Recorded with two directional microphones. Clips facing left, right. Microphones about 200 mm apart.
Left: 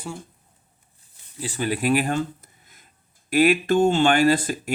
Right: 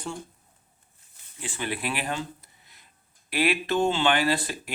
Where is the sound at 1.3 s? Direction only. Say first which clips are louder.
Left 6 dB; 40° left (ahead or behind).